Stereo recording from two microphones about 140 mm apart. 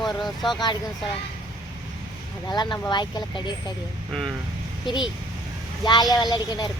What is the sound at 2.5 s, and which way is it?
Speech, 30° left (ahead or behind).